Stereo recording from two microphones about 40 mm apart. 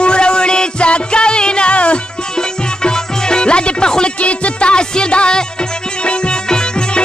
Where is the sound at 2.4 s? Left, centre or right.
Centre.